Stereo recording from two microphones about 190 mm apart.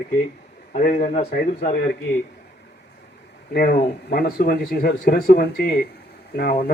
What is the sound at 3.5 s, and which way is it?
A man's voice, 55° left (ahead or behind).